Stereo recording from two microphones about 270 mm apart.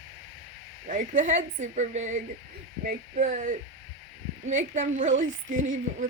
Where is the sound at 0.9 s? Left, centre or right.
Right.